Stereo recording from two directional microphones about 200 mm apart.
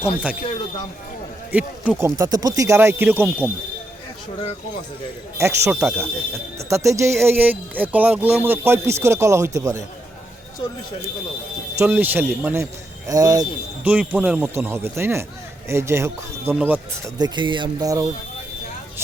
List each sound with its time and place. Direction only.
1.5 s speech: 10° right (ahead or behind)
5.4 s speech: 15° right (ahead or behind)
11.8 s speech: 10° right (ahead or behind)
17.2 s speech: 20° right (ahead or behind)